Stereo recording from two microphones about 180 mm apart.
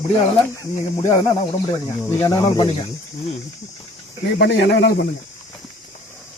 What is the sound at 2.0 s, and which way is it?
Speech, 15° left (ahead or behind).